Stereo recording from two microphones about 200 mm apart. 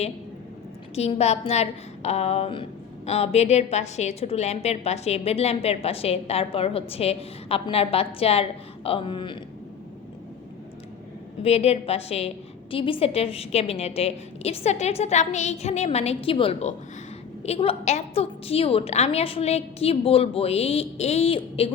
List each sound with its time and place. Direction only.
0.9 s a woman's voice: 30° left (ahead or behind)
11.4 s a woman's voice: 30° left (ahead or behind)